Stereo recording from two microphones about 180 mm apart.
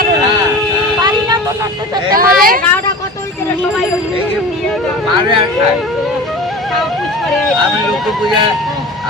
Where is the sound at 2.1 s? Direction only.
50° right (ahead or behind).